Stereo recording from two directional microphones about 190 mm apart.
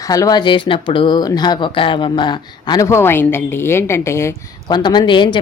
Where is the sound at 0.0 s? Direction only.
20° left (ahead or behind).